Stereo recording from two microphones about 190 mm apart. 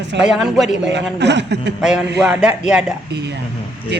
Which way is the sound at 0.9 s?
65° right (ahead or behind).